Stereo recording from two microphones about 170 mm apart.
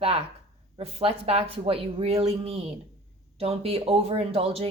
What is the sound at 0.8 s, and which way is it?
Speech, 35° right (ahead or behind).